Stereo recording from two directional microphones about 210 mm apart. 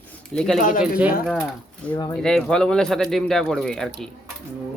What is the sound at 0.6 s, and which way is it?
Speech, 40° left (ahead or behind).